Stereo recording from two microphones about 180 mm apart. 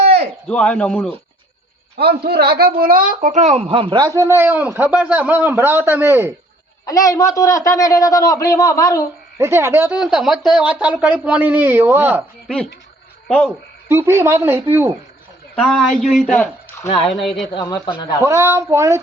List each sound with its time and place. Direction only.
0.4 s a man's voice: 5° left (ahead or behind)
2.0 s speech: 60° right (ahead or behind); by 6.3 s 15° right (ahead or behind)
6.8 s a man's voice: 20° left (ahead or behind)
9.4 s speech: 15° right (ahead or behind)
13.2 s speech: centre (ahead or behind)
13.8 s speech: 15° right (ahead or behind)
15.5 s speech: centre (ahead or behind)
16.3 s speech: 10° left (ahead or behind)
17.5 s a man's voice: 25° left (ahead or behind)
18.2 s speech: 15° right (ahead or behind)